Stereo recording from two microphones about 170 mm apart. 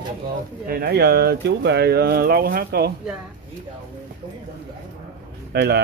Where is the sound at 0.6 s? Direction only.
65° right (ahead or behind).